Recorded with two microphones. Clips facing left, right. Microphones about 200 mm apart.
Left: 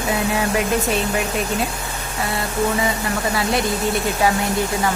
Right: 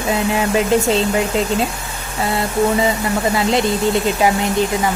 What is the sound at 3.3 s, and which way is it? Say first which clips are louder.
Speech: right 3 dB; 25° right (ahead or behind).